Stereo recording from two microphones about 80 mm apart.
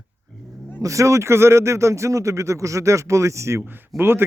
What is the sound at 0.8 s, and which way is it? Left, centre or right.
Speech, right.